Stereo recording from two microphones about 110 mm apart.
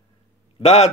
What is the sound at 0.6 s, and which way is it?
Speech, 75° left (ahead or behind).